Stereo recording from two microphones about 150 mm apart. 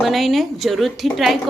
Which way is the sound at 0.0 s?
Centre (ahead or behind).